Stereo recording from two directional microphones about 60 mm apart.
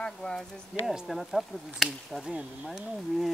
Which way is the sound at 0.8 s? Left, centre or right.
Centre.